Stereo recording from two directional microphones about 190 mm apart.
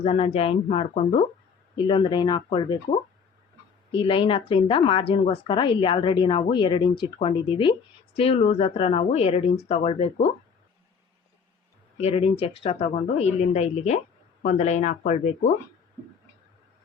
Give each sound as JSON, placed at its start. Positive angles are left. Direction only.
{"t": 0.0, "sound": "a woman's voice", "side_deg": 30}
{"t": 3.9, "sound": "a woman's voice", "side_deg": 25}
{"t": 11.9, "sound": "speech", "side_deg": 30}